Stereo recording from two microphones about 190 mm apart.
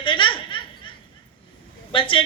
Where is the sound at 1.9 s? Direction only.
25° left (ahead or behind).